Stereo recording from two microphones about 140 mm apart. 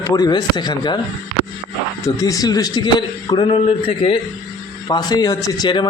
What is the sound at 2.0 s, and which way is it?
A man's voice, 25° left (ahead or behind).